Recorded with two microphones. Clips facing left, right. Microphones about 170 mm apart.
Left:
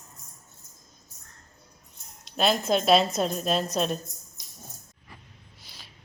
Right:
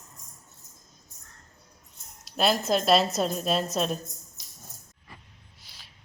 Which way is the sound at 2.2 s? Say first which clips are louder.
Even; centre (ahead or behind).